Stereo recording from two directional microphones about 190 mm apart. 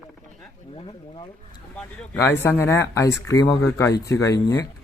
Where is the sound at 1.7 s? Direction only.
10° left (ahead or behind).